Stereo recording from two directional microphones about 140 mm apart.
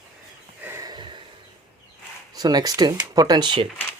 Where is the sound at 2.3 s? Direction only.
30° right (ahead or behind).